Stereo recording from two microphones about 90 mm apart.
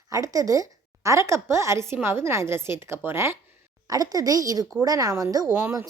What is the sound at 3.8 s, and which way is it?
Speech, 45° right (ahead or behind).